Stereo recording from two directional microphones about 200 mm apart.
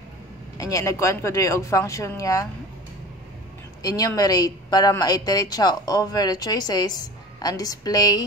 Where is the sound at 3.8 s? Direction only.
20° left (ahead or behind).